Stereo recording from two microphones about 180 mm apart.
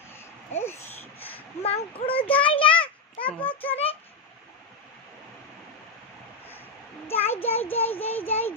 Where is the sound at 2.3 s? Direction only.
30° left (ahead or behind).